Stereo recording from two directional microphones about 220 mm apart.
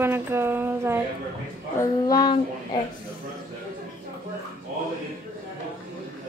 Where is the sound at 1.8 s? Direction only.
15° left (ahead or behind).